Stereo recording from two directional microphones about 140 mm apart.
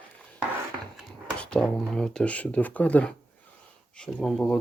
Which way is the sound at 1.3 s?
5° left (ahead or behind).